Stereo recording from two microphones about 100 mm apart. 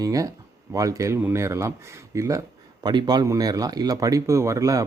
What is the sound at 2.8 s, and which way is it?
A man's voice, 45° right (ahead or behind).